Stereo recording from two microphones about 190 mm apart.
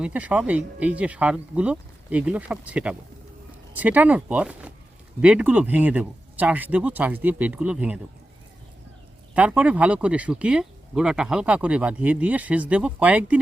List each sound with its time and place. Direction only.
0.0 s speech: 10° right (ahead or behind)
9.3 s speech: 5° right (ahead or behind)